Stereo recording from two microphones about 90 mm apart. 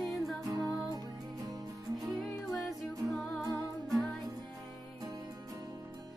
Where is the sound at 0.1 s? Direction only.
Centre (ahead or behind).